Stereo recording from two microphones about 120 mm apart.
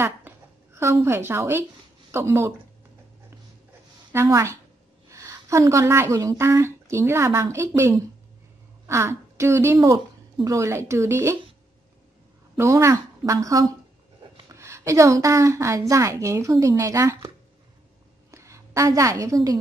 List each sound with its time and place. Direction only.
0.7 s a woman's voice: 20° right (ahead or behind)
4.1 s speech: 25° right (ahead or behind)
12.5 s speech: 25° right (ahead or behind)
18.3 s a sound: 25° right (ahead or behind)